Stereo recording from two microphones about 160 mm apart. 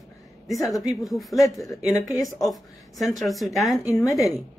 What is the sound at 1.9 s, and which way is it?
Speech, 20° left (ahead or behind).